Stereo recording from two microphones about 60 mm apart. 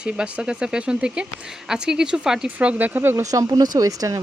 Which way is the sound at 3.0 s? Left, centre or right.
Right.